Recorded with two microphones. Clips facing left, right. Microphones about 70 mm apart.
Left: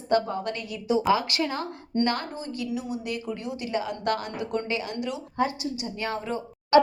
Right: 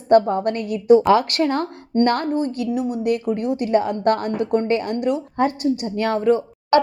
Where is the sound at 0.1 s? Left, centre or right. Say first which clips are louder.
Right 10 dB; right.